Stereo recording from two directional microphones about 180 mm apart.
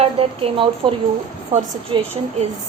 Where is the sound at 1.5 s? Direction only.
40° right (ahead or behind).